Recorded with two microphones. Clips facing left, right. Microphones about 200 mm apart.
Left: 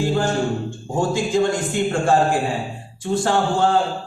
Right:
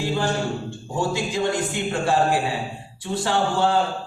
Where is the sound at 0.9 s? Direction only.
50° left (ahead or behind).